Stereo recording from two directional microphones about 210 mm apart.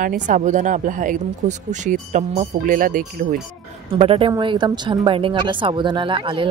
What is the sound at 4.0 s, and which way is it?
A woman's voice, 25° right (ahead or behind).